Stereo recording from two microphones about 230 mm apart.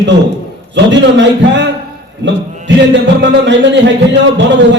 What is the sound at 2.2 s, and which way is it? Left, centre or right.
Music, right.